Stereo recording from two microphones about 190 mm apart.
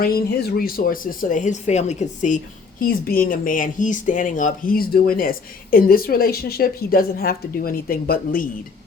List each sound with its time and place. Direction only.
0.0 s speech: 55° left (ahead or behind)
2.8 s speech: 50° left (ahead or behind)